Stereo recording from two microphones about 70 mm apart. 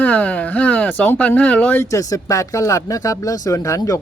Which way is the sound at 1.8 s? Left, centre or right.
Left.